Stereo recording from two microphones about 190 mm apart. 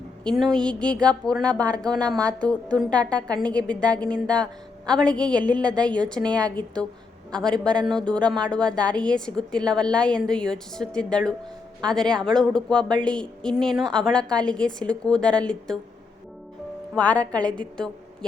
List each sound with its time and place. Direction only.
0.3 s a woman's voice: centre (ahead or behind)
1.9 s a woman's voice: 20° right (ahead or behind)
2.4 s a woman's voice: 5° left (ahead or behind)
3.2 s a woman's voice: 20° right (ahead or behind)
3.7 s a woman's voice: 5° left (ahead or behind)
16.9 s a woman's voice: 5° left (ahead or behind)